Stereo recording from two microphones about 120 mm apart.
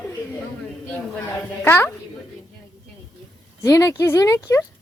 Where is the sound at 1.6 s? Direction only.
15° left (ahead or behind).